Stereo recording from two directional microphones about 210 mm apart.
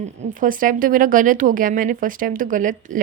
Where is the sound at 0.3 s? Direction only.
40° right (ahead or behind).